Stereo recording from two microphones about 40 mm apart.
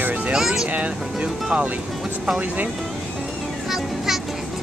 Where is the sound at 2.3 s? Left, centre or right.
Right.